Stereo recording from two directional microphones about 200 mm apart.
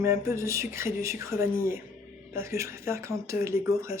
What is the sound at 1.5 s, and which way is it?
Speech, 45° left (ahead or behind).